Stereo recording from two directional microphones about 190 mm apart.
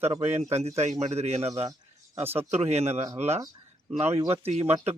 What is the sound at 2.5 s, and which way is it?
Speech, 35° right (ahead or behind).